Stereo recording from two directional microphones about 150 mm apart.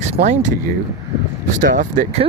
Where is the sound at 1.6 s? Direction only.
60° right (ahead or behind).